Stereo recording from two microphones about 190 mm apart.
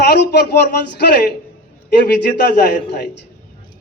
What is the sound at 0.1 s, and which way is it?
A man's voice, 60° left (ahead or behind).